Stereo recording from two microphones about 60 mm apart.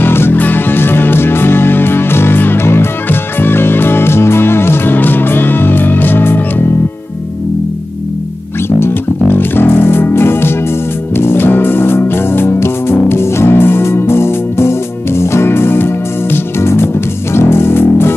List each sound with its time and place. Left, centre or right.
0.0 s music: left
8.7 s music: left